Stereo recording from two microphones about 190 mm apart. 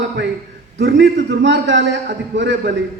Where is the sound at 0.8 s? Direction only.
70° right (ahead or behind).